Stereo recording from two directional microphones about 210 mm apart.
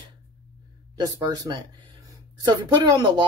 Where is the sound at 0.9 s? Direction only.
20° right (ahead or behind).